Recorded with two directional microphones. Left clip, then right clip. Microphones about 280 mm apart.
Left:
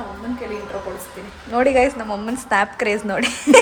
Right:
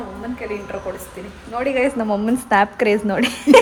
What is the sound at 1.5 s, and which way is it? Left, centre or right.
Speech, left.